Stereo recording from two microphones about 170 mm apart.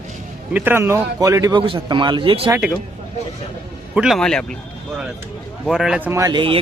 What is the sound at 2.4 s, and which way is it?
Speech, 10° right (ahead or behind).